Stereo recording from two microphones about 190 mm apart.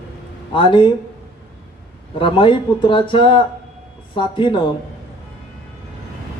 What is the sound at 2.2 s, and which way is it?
Speech, 25° left (ahead or behind).